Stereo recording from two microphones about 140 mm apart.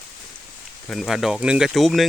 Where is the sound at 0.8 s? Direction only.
Centre (ahead or behind).